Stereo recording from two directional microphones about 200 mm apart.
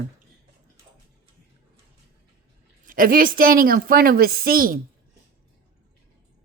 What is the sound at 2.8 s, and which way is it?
A woman's voice, 45° right (ahead or behind).